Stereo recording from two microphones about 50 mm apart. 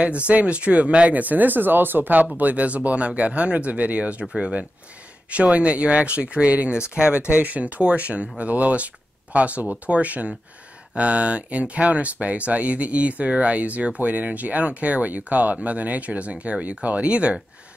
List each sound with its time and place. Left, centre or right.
0.0 s speech: right
4.3 s speech: centre
5.3 s speech: right